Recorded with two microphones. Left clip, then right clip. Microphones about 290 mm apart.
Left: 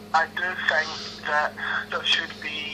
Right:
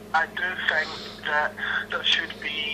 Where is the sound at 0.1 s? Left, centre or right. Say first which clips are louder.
Left 1 dB; centre.